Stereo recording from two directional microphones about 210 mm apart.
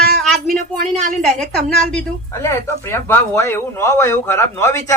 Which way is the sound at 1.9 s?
15° left (ahead or behind).